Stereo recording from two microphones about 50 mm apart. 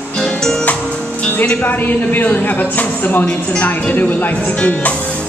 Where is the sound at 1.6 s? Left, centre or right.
Left.